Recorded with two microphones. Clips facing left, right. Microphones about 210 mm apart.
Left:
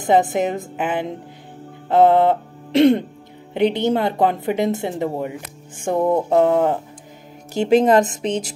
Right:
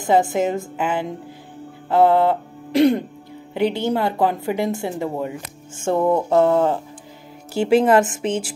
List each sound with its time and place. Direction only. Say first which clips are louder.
0.0 s a woman's voice: left 1 dB; 20° left (ahead or behind)
1.9 s music: left 2 dB; 20° left (ahead or behind)
3.5 s a woman's voice: left 2 dB; 20° left (ahead or behind)